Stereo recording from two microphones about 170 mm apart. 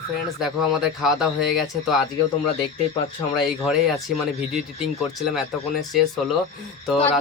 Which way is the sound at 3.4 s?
5° right (ahead or behind).